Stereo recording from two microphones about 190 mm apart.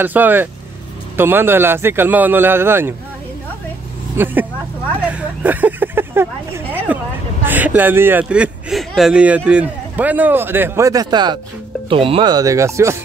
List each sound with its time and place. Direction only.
0.0 s speech: 10° right (ahead or behind)
4.2 s speech: 10° right (ahead or behind)